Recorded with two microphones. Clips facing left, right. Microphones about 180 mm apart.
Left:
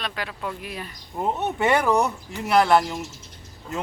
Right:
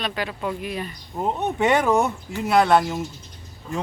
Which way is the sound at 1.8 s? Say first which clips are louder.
Right 1 dB; 20° right (ahead or behind).